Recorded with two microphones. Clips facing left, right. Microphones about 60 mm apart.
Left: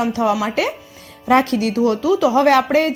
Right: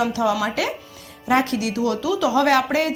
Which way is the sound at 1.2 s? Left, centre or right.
Left.